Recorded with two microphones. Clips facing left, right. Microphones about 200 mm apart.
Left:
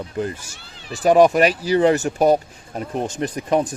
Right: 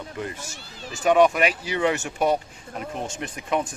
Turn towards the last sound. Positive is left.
turn(degrees=35)  # may be behind; listen again after turning